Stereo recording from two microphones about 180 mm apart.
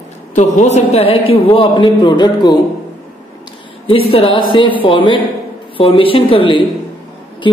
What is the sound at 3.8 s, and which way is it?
A man's voice, 30° left (ahead or behind).